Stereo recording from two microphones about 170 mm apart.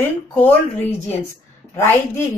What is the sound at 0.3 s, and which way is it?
Speech, 10° left (ahead or behind).